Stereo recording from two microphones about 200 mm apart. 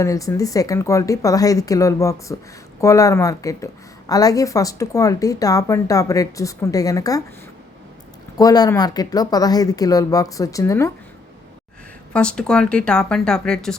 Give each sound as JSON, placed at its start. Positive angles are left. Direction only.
{"t": 0.0, "sound": "a woman's voice", "side_deg": 15}
{"t": 8.4, "sound": "a woman's voice", "side_deg": 20}
{"t": 12.1, "sound": "a woman's voice", "side_deg": 5}